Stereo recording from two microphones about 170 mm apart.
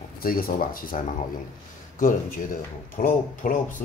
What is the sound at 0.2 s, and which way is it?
Speech, 60° left (ahead or behind).